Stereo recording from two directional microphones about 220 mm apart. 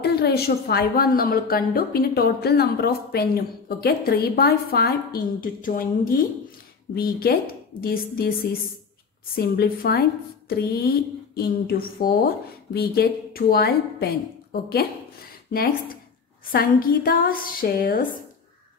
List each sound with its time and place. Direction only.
0.0 s a woman's voice: 45° left (ahead or behind)